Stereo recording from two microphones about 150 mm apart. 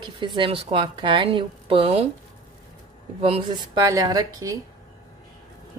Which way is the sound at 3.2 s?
35° right (ahead or behind).